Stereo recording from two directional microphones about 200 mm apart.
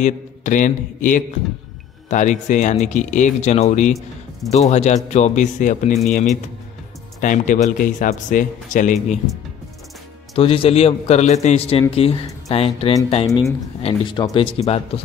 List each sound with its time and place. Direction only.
0.0 s speech: 40° left (ahead or behind)
10.3 s speech: 30° left (ahead or behind)